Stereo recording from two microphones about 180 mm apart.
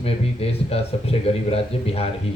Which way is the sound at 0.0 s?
35° left (ahead or behind).